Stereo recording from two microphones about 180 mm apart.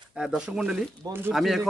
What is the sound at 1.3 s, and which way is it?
Speech, centre (ahead or behind).